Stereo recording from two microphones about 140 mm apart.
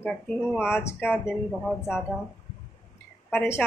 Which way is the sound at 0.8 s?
20° left (ahead or behind).